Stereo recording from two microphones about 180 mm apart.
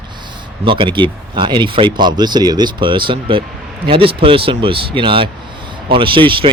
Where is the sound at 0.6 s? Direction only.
30° right (ahead or behind).